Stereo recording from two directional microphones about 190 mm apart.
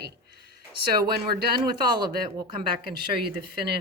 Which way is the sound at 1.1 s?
55° right (ahead or behind).